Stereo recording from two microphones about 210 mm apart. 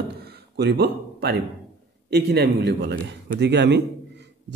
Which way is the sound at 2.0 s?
50° right (ahead or behind).